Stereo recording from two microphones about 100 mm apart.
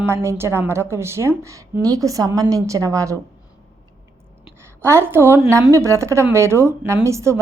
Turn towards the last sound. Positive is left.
turn(degrees=-30)  # may be behind; listen again after turning